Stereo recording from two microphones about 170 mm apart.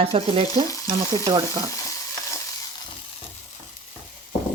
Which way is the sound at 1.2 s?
25° right (ahead or behind).